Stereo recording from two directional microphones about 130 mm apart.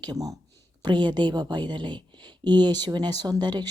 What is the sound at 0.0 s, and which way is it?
Speech, 30° right (ahead or behind).